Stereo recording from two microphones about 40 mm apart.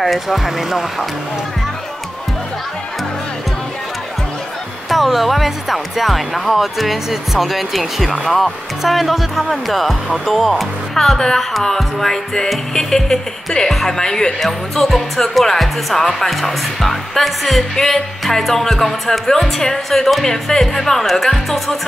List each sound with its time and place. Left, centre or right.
0.0 s speech: centre
4.8 s speech: centre
8.1 s speech: centre
8.8 s speech: centre
14.4 s speech: centre